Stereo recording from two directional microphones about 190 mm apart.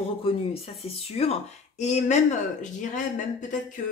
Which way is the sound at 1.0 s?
30° left (ahead or behind).